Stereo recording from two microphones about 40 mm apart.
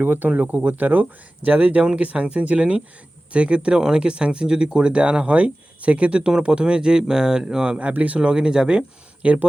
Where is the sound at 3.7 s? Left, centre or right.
Right.